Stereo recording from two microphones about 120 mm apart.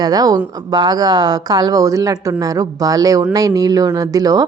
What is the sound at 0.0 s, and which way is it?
A woman's voice, 30° right (ahead or behind).